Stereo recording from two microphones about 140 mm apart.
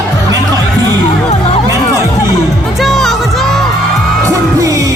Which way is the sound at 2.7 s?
Centre (ahead or behind).